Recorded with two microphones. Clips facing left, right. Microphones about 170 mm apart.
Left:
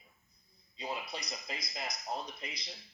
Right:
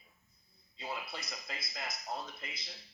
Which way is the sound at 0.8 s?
15° left (ahead or behind).